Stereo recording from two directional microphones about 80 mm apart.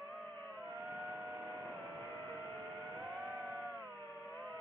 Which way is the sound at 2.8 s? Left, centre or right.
Right.